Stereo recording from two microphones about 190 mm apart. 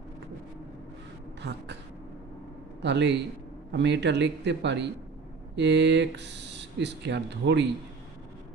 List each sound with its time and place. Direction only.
1.4 s speech: 65° right (ahead or behind)
2.8 s speech: 65° right (ahead or behind)